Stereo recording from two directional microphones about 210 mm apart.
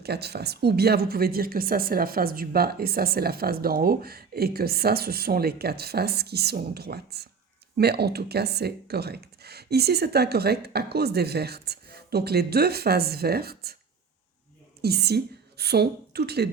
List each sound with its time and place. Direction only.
0.0 s speech: 50° right (ahead or behind)
14.8 s a woman's voice: 50° right (ahead or behind)